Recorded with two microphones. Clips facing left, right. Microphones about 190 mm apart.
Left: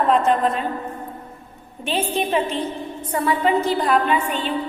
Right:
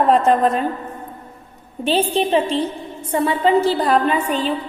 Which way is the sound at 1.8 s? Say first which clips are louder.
Right 5 dB; 35° right (ahead or behind).